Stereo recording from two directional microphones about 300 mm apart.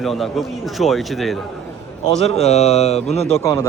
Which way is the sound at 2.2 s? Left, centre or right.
Left.